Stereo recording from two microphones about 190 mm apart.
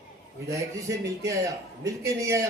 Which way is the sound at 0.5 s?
15° right (ahead or behind).